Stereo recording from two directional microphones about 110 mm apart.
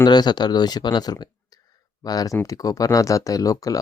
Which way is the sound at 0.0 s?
40° left (ahead or behind).